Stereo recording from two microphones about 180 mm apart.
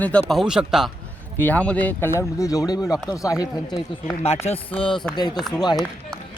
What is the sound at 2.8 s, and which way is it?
Speech, 5° right (ahead or behind).